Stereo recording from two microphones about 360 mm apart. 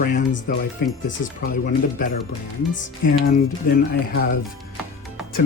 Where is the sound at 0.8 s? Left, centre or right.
Left.